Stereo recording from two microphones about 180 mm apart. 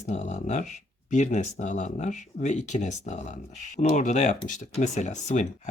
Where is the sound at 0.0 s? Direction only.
40° left (ahead or behind).